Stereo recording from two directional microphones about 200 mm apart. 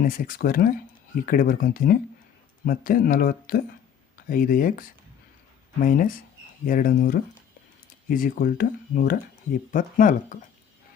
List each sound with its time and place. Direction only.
0.0 s speech: 45° left (ahead or behind)